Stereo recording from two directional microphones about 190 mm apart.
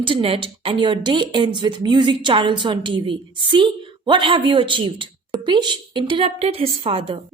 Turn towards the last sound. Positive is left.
turn(degrees=-30)  # may be behind; listen again after turning